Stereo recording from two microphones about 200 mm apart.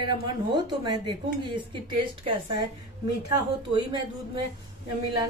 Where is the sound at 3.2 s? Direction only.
25° right (ahead or behind).